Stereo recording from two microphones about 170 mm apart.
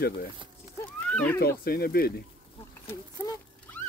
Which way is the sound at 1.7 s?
60° left (ahead or behind).